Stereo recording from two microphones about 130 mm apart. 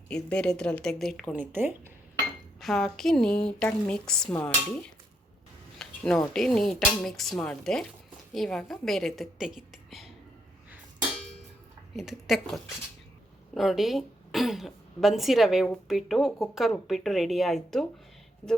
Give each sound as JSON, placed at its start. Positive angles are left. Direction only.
{"t": 0.1, "sound": "a woman's voice", "side_deg": 10}
{"t": 1.3, "sound": "speech", "side_deg": -15}
{"t": 2.6, "sound": "a woman's voice", "side_deg": 0}
{"t": 5.8, "sound": "speech", "side_deg": 5}
{"t": 11.9, "sound": "a woman's voice", "side_deg": 0}